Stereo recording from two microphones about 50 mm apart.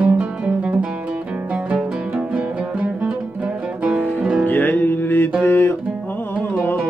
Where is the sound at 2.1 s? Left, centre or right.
Right.